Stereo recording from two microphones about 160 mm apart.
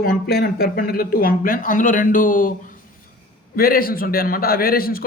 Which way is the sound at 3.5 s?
65° left (ahead or behind).